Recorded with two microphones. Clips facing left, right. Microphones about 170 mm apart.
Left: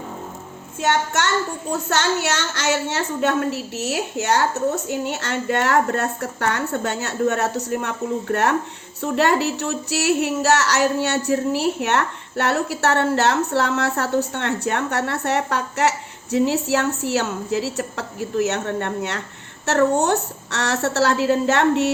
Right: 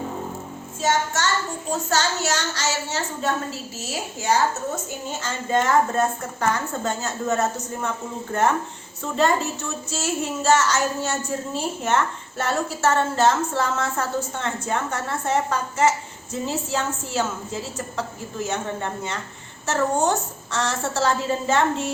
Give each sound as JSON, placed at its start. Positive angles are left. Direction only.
{"t": 0.8, "sound": "child singing", "side_deg": 65}
{"t": 1.9, "sound": "speech", "side_deg": 70}